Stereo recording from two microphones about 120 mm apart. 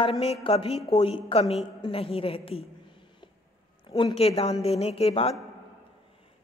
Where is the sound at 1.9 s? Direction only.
55° left (ahead or behind).